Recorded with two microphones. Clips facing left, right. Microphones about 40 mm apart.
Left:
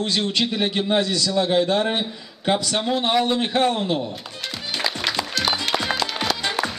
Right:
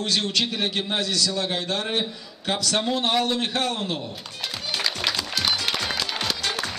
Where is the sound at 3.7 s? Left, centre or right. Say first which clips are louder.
Left 6 dB; centre.